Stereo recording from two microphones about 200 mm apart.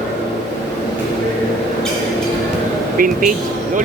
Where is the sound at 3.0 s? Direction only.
45° right (ahead or behind).